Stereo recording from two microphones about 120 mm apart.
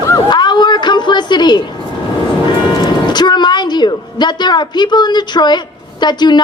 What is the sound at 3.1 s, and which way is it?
A woman's voice, 35° left (ahead or behind).